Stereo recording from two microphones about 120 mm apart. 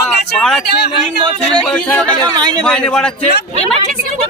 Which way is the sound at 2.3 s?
35° right (ahead or behind).